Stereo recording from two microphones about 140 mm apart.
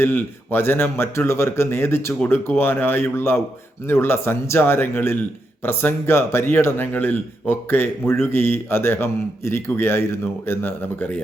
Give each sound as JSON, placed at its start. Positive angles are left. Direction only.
{"t": 0.0, "sound": "speech", "side_deg": 15}